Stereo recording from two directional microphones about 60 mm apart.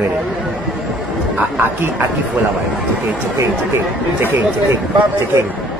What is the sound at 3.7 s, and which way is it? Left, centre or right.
Speech, right.